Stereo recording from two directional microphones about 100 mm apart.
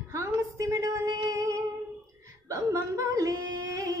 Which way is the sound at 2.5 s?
30° right (ahead or behind).